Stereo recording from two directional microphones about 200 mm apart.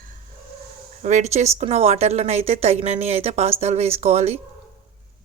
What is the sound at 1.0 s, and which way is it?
Speech, 35° right (ahead or behind).